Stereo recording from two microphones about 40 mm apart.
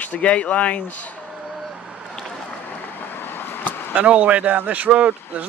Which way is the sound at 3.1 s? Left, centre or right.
Left.